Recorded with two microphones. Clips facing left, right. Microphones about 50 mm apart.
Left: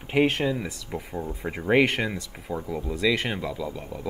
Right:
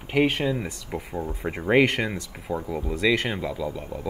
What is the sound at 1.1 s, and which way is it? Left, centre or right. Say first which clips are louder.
Speech: right 2 dB; centre.